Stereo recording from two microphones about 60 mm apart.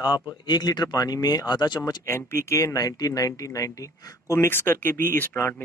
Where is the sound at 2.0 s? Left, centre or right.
Left.